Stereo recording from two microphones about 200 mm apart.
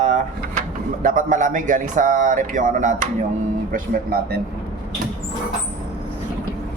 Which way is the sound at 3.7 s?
50° right (ahead or behind).